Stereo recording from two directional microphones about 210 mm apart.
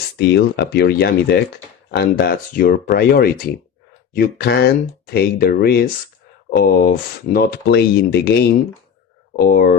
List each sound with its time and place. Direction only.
0.2 s speech: 55° left (ahead or behind)
9.3 s speech: 45° left (ahead or behind)